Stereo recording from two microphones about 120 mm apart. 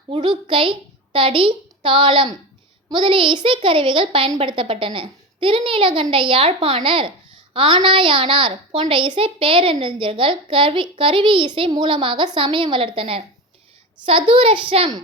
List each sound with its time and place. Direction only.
0.1 s a woman's voice: 45° right (ahead or behind)